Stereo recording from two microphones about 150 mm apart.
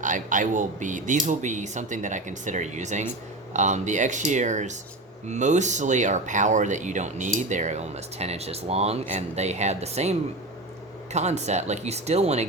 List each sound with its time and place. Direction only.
0.0 s speech: 60° right (ahead or behind); by 12.5 s 45° right (ahead or behind)